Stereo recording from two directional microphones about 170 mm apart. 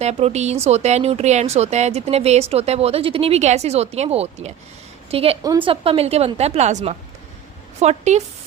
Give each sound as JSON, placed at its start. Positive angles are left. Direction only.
{"t": 0.0, "sound": "speech", "side_deg": -40}